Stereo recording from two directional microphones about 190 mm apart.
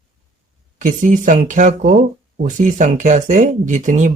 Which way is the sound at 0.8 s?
40° right (ahead or behind).